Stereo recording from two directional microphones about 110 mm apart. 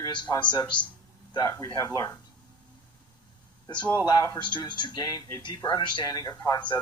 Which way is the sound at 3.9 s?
35° left (ahead or behind).